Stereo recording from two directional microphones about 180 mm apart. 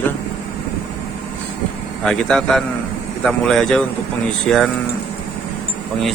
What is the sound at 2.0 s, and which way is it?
Speech, 5° left (ahead or behind).